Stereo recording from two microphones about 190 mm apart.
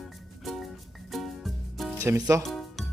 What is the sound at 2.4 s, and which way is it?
Music, centre (ahead or behind).